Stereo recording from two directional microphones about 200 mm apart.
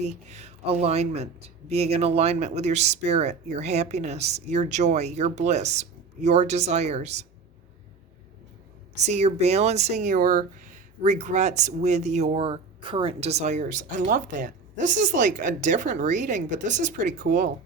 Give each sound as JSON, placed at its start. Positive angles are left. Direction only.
{"t": 0.0, "sound": "speech", "side_deg": -35}
{"t": 9.0, "sound": "speech", "side_deg": -35}